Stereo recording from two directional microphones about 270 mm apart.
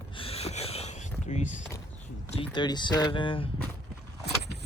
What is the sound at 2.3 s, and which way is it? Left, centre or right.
Speech, centre.